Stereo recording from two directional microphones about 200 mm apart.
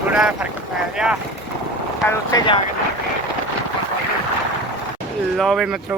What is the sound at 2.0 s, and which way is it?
Speech, 20° left (ahead or behind).